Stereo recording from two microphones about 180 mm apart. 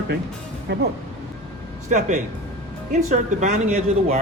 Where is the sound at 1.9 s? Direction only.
40° right (ahead or behind).